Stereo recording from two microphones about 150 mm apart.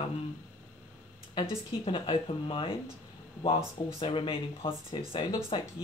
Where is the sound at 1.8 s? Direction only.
35° left (ahead or behind).